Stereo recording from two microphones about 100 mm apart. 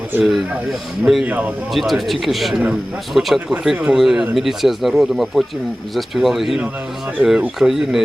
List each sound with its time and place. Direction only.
0.7 s speech: centre (ahead or behind)
1.2 s speech: 15° right (ahead or behind)
1.7 s speech: centre (ahead or behind)